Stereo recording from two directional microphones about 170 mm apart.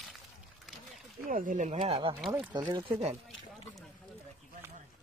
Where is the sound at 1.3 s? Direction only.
50° right (ahead or behind).